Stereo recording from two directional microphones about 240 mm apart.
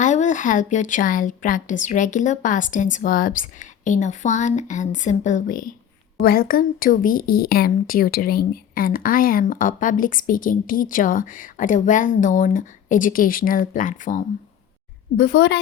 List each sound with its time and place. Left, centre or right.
0.0 s speech: left
15.2 s a woman's voice: left